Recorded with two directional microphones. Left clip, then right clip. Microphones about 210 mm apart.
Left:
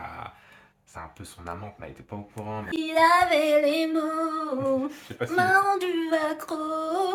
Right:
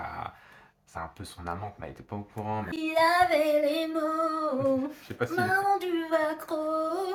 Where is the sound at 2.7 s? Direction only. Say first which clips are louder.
Left 5 dB; 30° left (ahead or behind).